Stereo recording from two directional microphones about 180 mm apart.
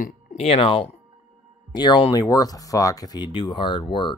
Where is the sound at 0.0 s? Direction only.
40° left (ahead or behind).